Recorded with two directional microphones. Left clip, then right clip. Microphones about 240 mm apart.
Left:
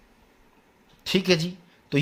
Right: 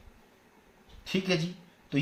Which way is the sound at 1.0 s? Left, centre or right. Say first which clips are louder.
Left 8 dB; left.